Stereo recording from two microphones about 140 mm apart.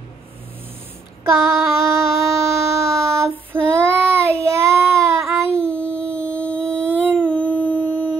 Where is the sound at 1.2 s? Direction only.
20° right (ahead or behind).